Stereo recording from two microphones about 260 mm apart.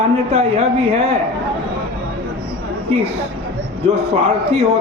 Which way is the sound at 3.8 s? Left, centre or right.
Right.